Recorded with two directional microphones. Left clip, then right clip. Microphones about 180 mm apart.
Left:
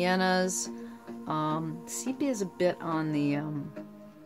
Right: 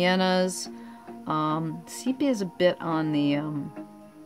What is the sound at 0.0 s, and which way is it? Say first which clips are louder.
Speech: right 3 dB; 30° right (ahead or behind).